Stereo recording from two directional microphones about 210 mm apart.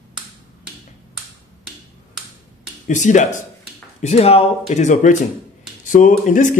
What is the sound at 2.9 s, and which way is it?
Speech, 35° left (ahead or behind).